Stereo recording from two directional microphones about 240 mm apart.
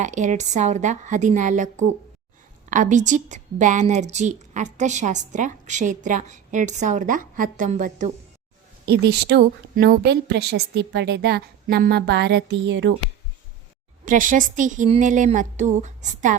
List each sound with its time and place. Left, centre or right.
0.0 s a woman's voice: right
14.0 s a woman's voice: right